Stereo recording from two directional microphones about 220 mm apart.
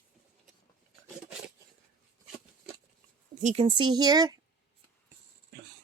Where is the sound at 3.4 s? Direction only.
25° right (ahead or behind).